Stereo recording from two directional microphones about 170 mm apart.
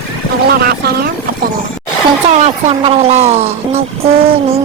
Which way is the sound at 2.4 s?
40° right (ahead or behind).